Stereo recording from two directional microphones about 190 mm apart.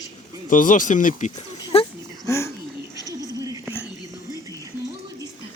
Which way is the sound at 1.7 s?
30° left (ahead or behind).